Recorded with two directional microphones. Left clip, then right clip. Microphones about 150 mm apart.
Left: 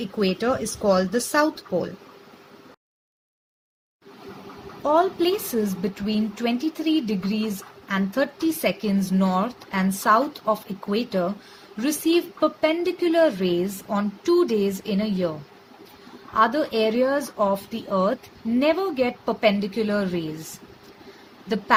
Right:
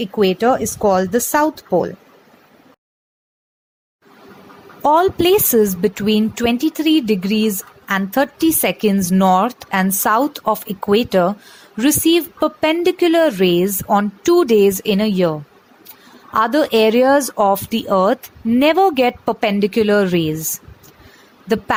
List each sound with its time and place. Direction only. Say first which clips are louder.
0.0 s speech: right 9 dB; 50° right (ahead or behind)
4.8 s a woman's voice: right 7 dB; 80° right